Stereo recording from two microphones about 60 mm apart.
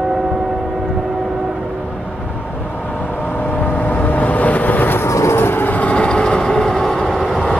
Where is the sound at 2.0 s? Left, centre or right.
Centre.